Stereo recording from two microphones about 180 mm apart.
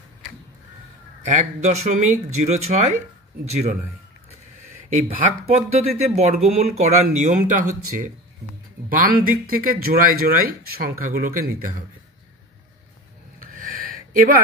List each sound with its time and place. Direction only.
1.2 s speech: 40° right (ahead or behind)
5.5 s speech: 35° right (ahead or behind)
13.4 s a sound: 50° right (ahead or behind)